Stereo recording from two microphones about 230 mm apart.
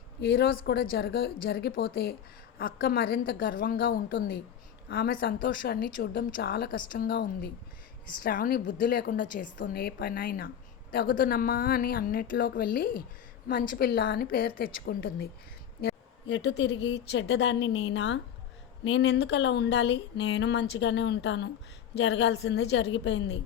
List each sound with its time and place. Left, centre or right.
0.2 s a woman's voice: left